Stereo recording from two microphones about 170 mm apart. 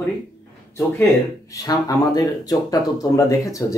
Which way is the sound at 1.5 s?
20° left (ahead or behind).